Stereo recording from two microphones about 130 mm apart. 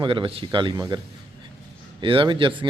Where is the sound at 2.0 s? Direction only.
40° right (ahead or behind).